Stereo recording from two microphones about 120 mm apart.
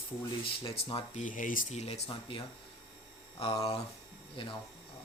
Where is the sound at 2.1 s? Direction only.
45° left (ahead or behind).